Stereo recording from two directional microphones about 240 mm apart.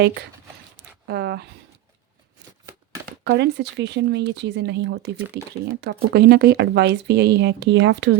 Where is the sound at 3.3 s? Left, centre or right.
Right.